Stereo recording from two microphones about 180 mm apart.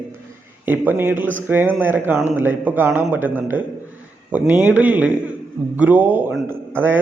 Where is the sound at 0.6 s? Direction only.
10° right (ahead or behind).